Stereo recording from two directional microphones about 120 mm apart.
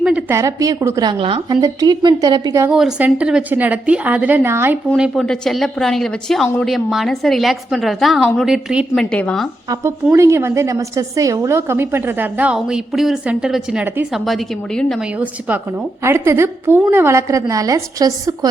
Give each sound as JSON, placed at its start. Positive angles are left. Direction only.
{"t": 0.0, "sound": "a sound", "side_deg": -10}
{"t": 0.3, "sound": "a woman's voice", "side_deg": -25}
{"t": 1.2, "sound": "speech", "side_deg": -45}
{"t": 1.6, "sound": "a woman's voice", "side_deg": -30}
{"t": 3.0, "sound": "a woman's voice", "side_deg": -10}
{"t": 4.9, "sound": "a woman's voice", "side_deg": -5}
{"t": 9.0, "sound": "a woman's voice", "side_deg": 5}
{"t": 9.6, "sound": "a woman's voice", "side_deg": -25}
{"t": 13.8, "sound": "a woman's voice", "side_deg": -15}
{"t": 14.1, "sound": "a woman's voice", "side_deg": 0}
{"t": 15.2, "sound": "a woman's voice", "side_deg": -15}